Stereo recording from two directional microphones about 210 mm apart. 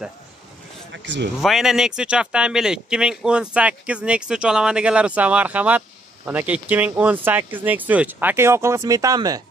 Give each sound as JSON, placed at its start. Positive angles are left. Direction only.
{"t": 0.9, "sound": "speech", "side_deg": -60}
{"t": 1.4, "sound": "speech", "side_deg": 0}